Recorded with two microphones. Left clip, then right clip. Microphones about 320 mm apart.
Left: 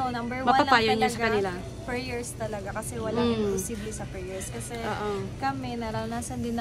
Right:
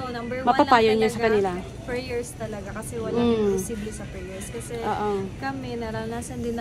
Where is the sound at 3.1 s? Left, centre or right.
Centre.